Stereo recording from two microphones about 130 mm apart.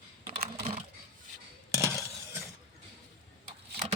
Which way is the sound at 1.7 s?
20° right (ahead or behind).